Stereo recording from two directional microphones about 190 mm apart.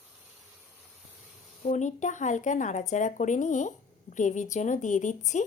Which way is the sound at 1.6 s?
40° left (ahead or behind).